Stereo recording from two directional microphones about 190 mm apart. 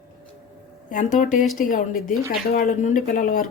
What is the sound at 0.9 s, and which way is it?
Speech, 45° left (ahead or behind).